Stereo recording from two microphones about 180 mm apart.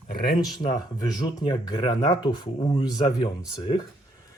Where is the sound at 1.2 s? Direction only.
25° left (ahead or behind).